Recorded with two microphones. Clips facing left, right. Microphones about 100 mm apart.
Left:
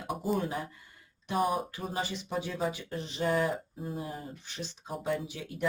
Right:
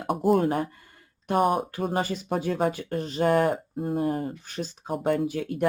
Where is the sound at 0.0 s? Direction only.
60° right (ahead or behind).